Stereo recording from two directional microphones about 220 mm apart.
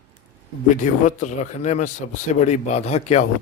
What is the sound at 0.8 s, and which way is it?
A man's voice, 35° left (ahead or behind).